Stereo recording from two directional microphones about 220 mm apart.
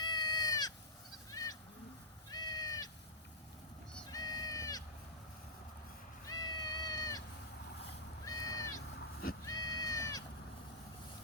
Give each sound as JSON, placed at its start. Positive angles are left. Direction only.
{"t": 0.0, "sound": "goat", "side_deg": 15}
{"t": 2.3, "sound": "cat", "side_deg": 15}
{"t": 4.1, "sound": "run", "side_deg": 15}
{"t": 6.2, "sound": "cat", "side_deg": 15}
{"t": 8.2, "sound": "a sound", "side_deg": 15}
{"t": 9.4, "sound": "goat", "side_deg": 15}